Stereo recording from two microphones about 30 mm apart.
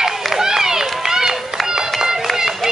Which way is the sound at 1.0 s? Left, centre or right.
Centre.